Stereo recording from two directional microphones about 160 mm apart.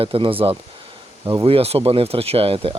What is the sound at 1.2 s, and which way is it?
Speech, 15° right (ahead or behind).